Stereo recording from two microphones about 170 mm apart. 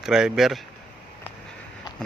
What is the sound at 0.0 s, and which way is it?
Speech, 5° right (ahead or behind).